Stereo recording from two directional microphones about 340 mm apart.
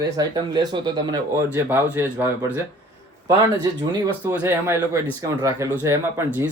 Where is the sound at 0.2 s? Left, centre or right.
Centre.